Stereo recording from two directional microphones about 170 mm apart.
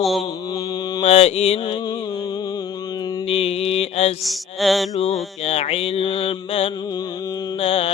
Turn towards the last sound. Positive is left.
turn(degrees=35)  # may be behind; listen again after turning